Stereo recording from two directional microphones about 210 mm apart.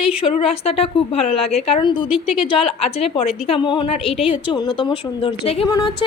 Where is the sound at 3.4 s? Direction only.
25° left (ahead or behind).